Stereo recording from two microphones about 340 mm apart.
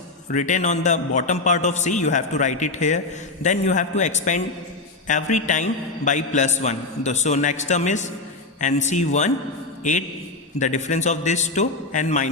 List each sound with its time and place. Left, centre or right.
0.3 s a man's voice: left
10.6 s a man's voice: left